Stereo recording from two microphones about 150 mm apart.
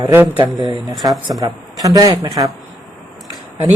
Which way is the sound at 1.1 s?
Centre (ahead or behind).